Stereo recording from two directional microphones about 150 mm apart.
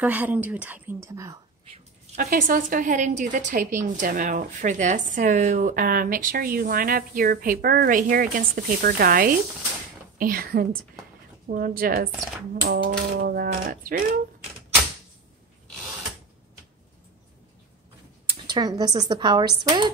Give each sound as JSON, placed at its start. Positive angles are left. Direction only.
{"t": 0.0, "sound": "a woman's voice", "side_deg": -10}
{"t": 2.1, "sound": "a woman's voice", "side_deg": -75}
{"t": 12.6, "sound": "typewriter", "side_deg": -90}
{"t": 18.5, "sound": "a woman's voice", "side_deg": -25}